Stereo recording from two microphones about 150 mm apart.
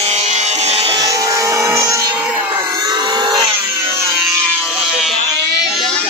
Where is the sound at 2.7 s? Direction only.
25° right (ahead or behind).